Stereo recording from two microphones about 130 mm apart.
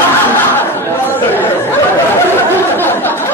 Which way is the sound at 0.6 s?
15° left (ahead or behind).